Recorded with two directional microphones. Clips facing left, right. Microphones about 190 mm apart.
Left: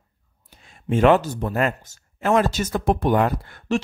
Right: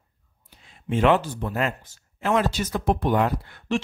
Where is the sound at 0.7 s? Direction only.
45° left (ahead or behind).